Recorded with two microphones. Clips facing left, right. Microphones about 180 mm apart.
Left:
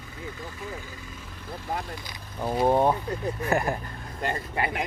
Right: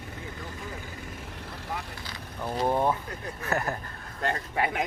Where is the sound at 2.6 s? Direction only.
20° left (ahead or behind).